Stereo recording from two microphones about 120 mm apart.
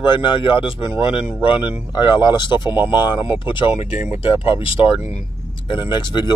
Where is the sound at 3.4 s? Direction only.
45° left (ahead or behind).